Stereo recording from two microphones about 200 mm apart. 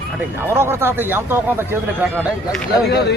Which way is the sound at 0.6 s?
10° right (ahead or behind).